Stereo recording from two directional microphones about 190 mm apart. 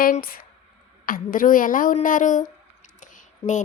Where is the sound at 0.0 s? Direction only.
50° left (ahead or behind).